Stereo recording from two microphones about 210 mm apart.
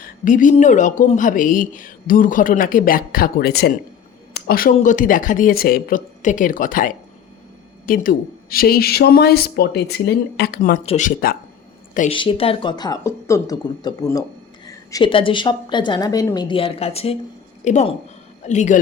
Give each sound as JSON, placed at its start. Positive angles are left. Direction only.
{"t": 0.3, "sound": "speech", "side_deg": 40}
{"t": 10.8, "sound": "speech", "side_deg": 35}
{"t": 11.9, "sound": "a woman's voice", "side_deg": 25}